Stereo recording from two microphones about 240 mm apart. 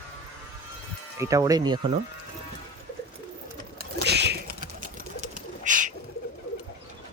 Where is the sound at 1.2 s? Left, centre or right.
Centre.